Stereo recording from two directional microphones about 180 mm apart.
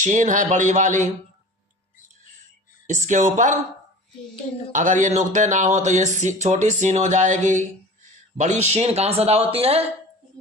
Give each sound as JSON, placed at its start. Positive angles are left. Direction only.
{"t": 0.0, "sound": "speech", "side_deg": -45}
{"t": 2.8, "sound": "speech", "side_deg": -45}
{"t": 4.7, "sound": "speech", "side_deg": -45}